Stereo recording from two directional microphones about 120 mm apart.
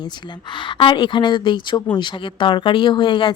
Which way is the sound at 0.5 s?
40° left (ahead or behind).